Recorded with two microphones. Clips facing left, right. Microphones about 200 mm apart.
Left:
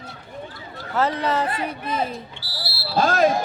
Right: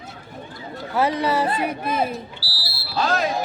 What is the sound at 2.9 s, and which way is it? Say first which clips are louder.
Speech: left 4 dB; 50° left (ahead or behind).